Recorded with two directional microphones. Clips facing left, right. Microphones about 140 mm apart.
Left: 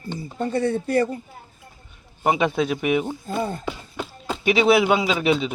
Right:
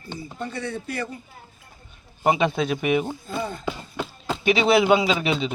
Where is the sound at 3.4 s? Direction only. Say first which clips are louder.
Left 4 dB; 35° left (ahead or behind).